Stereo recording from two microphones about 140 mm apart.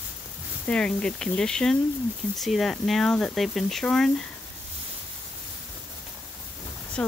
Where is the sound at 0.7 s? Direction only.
5° left (ahead or behind).